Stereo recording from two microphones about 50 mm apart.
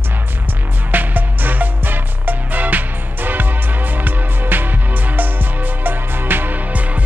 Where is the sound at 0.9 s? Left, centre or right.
Right.